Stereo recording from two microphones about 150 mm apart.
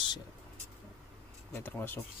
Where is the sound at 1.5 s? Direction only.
15° left (ahead or behind).